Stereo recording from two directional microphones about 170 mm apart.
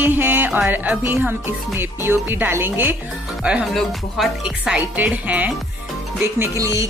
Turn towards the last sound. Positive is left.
turn(degrees=-15)  # may be behind; listen again after turning